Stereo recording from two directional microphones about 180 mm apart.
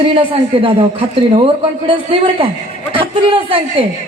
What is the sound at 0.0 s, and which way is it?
A man's voice, 30° right (ahead or behind).